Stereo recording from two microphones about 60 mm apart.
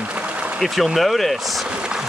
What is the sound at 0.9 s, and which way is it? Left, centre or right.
Speech, centre.